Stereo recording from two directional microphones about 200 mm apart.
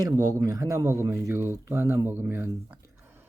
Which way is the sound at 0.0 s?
20° right (ahead or behind).